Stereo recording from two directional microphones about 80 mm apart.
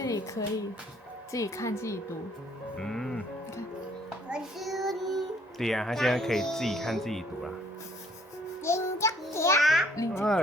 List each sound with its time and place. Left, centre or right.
0.0 s a sound: left
1.3 s speech: left
2.7 s music: centre
4.3 s a child's voice: centre
8.6 s music: left
9.6 s music: centre
9.9 s music: left